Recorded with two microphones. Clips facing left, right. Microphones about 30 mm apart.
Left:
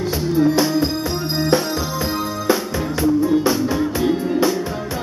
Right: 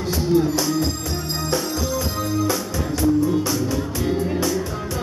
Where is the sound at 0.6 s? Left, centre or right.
Left.